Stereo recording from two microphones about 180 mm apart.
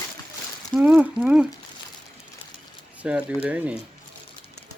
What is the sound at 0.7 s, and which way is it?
Speech, 10° right (ahead or behind).